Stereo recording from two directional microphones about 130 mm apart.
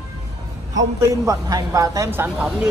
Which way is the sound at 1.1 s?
25° right (ahead or behind).